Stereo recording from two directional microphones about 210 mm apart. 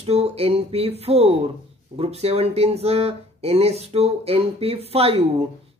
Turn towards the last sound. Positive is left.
turn(degrees=-30)  # may be behind; listen again after turning